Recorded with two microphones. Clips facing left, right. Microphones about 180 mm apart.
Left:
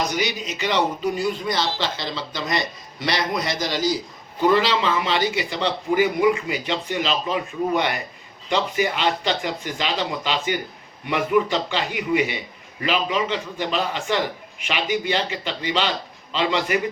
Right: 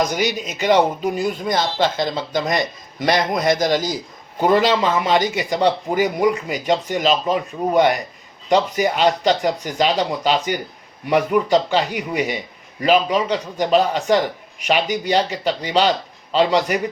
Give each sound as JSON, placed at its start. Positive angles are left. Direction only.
{"t": 0.1, "sound": "speech", "side_deg": -50}